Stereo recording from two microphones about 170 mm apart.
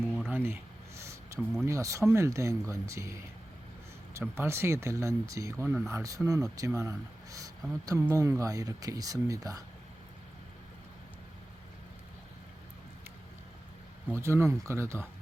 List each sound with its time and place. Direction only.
0.3 s a sound: 15° right (ahead or behind)
1.6 s speech: 15° right (ahead or behind)
4.4 s speech: 15° right (ahead or behind)
14.2 s speech: 15° right (ahead or behind)